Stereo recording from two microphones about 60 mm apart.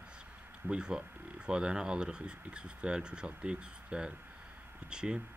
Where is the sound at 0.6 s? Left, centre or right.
Centre.